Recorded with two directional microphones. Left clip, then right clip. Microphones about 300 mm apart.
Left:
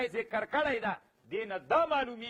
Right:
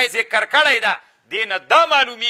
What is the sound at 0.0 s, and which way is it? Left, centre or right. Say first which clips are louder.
Speech: right 15 dB; centre.